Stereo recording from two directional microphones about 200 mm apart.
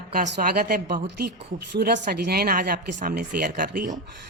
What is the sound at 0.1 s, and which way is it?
A woman's voice, 50° right (ahead or behind).